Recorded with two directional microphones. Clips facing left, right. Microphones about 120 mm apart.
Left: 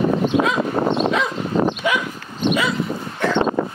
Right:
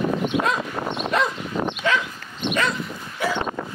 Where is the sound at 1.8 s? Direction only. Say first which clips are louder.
Left 2 dB; 15° left (ahead or behind).